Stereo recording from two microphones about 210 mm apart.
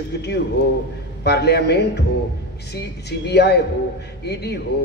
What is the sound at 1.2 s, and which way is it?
Speech, 50° left (ahead or behind).